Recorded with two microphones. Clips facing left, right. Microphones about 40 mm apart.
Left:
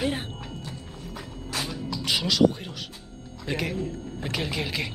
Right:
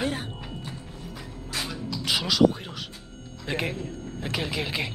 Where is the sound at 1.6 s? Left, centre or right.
Centre.